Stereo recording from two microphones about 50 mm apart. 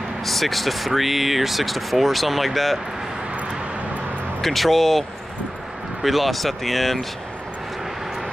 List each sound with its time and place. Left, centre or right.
0.2 s speech: centre
4.4 s speech: centre
6.0 s speech: centre